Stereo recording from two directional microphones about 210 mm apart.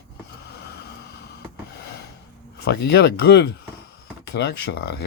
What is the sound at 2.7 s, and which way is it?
Speech, 50° left (ahead or behind).